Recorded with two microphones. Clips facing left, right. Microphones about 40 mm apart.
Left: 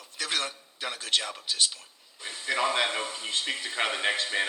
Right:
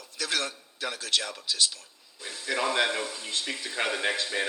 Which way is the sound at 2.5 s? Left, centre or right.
Centre.